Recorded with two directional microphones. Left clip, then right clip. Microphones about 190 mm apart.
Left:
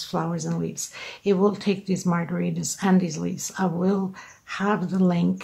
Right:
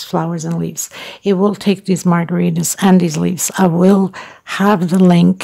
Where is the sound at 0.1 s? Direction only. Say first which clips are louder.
Right 9 dB; 45° right (ahead or behind).